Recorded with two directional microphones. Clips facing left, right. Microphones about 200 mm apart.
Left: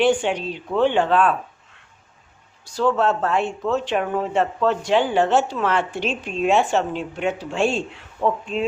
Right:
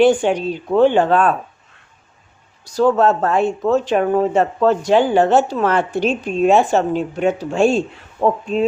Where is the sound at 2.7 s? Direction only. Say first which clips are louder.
Right 5 dB; 40° right (ahead or behind).